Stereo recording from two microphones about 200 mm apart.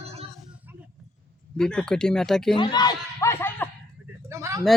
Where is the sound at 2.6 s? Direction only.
20° left (ahead or behind).